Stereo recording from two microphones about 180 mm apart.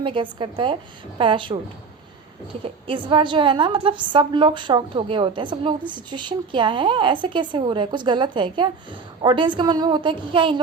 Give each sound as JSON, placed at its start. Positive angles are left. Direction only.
{"t": 0.0, "sound": "a woman's voice", "side_deg": -25}
{"t": 2.8, "sound": "a woman's voice", "side_deg": -25}